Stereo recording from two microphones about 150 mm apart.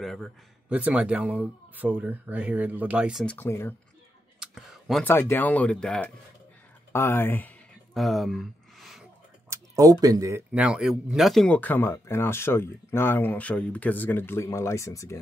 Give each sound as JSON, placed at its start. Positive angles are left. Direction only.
{"t": 0.0, "sound": "speech", "side_deg": 0}
{"t": 3.3, "sound": "speech", "side_deg": 15}
{"t": 4.4, "sound": "clicking", "side_deg": -5}
{"t": 5.0, "sound": "speech", "side_deg": 15}
{"t": 6.9, "sound": "speech", "side_deg": 15}
{"t": 7.9, "sound": "a sound", "side_deg": 0}
{"t": 9.5, "sound": "speech", "side_deg": -20}
{"t": 10.5, "sound": "speech", "side_deg": -5}